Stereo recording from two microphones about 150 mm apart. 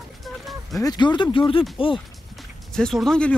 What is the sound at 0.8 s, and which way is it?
Speech, 30° left (ahead or behind).